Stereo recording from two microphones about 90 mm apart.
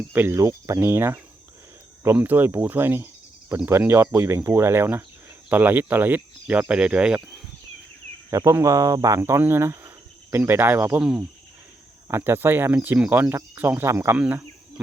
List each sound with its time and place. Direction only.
0.1 s speech: 25° right (ahead or behind)
8.3 s speech: 35° right (ahead or behind)
9.4 s cricket: 25° right (ahead or behind)
10.3 s speech: 25° right (ahead or behind)
12.0 s speech: 25° right (ahead or behind)